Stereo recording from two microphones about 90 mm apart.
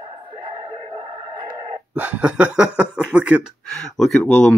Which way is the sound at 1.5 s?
15° right (ahead or behind).